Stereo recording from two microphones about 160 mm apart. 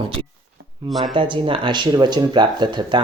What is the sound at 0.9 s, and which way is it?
Speech, centre (ahead or behind).